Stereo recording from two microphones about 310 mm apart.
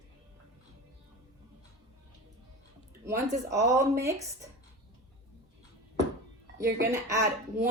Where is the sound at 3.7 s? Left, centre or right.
Centre.